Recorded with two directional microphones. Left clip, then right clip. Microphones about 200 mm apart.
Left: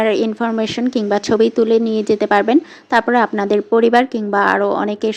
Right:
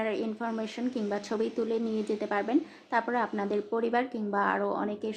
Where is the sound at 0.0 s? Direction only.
35° left (ahead or behind).